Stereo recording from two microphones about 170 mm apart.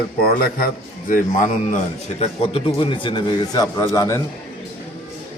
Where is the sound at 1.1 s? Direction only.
50° left (ahead or behind).